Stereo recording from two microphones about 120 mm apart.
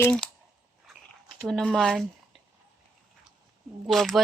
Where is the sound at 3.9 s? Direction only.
Centre (ahead or behind).